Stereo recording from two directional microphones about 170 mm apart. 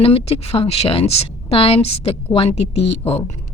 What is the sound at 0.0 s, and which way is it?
A woman's voice, 35° left (ahead or behind).